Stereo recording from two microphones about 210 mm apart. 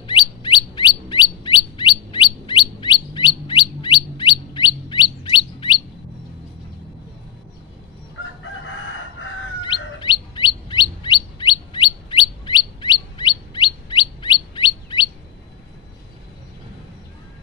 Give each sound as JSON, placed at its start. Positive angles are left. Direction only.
{"t": 0.4, "sound": "chirp", "side_deg": 25}
{"t": 9.6, "sound": "chirp", "side_deg": 20}